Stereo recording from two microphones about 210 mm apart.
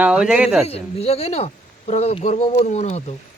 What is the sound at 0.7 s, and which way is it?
Speech, 30° left (ahead or behind).